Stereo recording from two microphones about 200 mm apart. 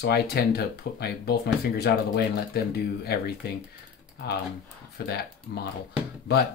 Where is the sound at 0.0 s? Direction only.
55° left (ahead or behind).